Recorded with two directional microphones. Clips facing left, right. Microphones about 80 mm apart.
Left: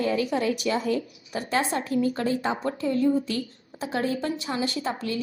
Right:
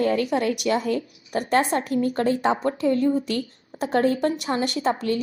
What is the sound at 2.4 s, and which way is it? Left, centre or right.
A woman's voice, right.